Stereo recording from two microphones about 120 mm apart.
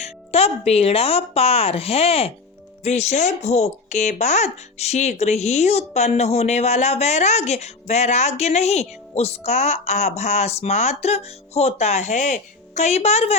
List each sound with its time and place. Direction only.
0.0 s speech: 55° left (ahead or behind)